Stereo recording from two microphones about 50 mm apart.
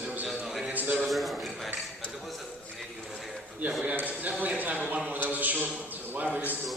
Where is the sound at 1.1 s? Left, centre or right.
Centre.